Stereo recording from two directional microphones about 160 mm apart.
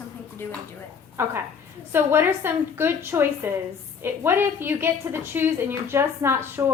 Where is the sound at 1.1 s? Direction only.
15° right (ahead or behind).